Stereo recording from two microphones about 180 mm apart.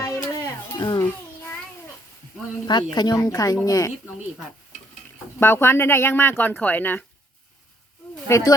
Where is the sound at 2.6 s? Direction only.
25° left (ahead or behind).